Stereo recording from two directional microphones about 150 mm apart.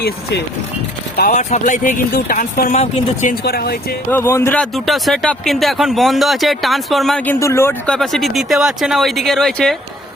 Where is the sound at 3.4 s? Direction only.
90° left.